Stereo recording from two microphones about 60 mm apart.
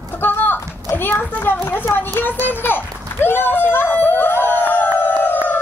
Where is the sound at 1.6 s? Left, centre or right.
Left.